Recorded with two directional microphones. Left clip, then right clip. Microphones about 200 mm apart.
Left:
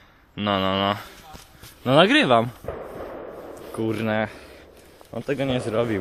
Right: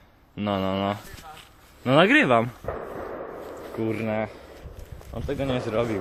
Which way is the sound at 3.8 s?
35° left (ahead or behind).